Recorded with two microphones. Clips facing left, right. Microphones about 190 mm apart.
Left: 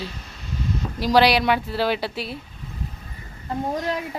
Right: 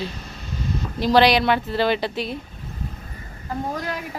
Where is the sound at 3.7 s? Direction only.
25° left (ahead or behind).